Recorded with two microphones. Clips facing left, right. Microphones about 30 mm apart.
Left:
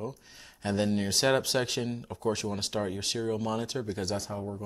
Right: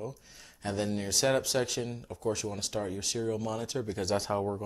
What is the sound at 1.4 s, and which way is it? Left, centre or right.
Speech, left.